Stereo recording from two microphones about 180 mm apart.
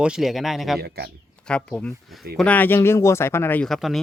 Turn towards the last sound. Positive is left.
turn(degrees=0)  # may be behind; listen again after turning